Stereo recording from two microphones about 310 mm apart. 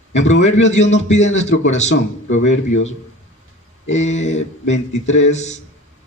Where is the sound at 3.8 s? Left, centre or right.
Left.